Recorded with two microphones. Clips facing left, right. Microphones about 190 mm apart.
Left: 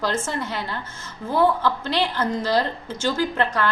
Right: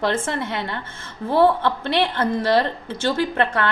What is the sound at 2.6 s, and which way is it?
Speech, 60° right (ahead or behind).